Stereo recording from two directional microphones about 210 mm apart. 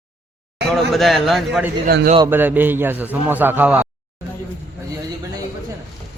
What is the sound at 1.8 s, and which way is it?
Speech, 45° right (ahead or behind).